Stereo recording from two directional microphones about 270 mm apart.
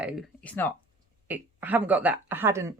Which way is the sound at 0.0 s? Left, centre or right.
Centre.